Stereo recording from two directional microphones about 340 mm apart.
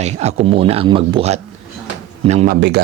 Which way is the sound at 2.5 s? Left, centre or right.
Right.